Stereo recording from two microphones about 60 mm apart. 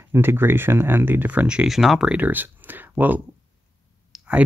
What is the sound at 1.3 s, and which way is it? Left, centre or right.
Speech, right.